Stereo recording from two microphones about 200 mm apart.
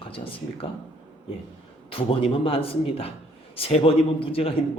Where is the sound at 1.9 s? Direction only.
25° left (ahead or behind).